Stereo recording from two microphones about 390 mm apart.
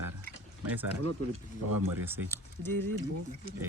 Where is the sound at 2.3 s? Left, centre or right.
Centre.